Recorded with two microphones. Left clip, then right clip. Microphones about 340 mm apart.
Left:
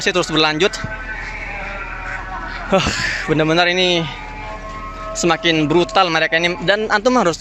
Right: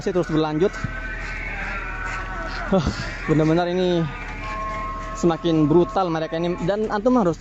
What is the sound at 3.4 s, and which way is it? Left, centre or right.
Speech, left.